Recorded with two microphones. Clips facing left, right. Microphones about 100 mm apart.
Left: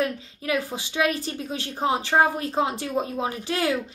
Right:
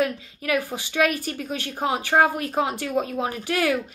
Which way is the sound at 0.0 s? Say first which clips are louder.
Right 2 dB; 30° left (ahead or behind).